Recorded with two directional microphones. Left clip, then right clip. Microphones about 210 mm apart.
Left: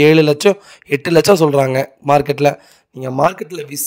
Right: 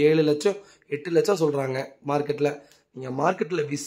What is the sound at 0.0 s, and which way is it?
Speech, 45° left (ahead or behind).